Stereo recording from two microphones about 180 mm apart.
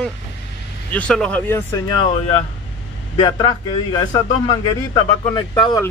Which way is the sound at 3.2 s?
25° left (ahead or behind).